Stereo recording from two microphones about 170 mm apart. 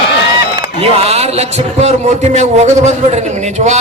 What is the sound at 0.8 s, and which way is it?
A man's voice, 35° right (ahead or behind).